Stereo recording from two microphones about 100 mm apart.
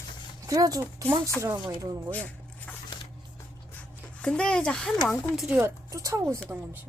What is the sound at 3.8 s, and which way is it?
Speech, 10° left (ahead or behind).